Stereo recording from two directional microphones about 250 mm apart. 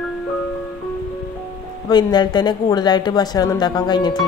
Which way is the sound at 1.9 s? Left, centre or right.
Centre.